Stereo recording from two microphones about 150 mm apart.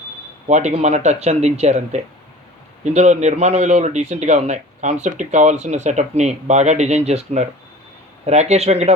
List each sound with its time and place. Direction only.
0.4 s a man's voice: 50° right (ahead or behind)